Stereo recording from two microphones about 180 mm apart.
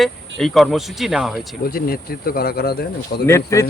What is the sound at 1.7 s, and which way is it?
Speech, 55° left (ahead or behind).